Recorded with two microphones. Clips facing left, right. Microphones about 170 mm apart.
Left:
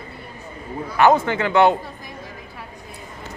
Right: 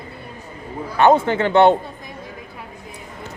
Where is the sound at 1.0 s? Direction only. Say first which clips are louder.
Right 1 dB; 25° right (ahead or behind).